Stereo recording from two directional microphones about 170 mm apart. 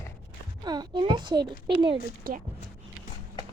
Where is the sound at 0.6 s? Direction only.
25° right (ahead or behind).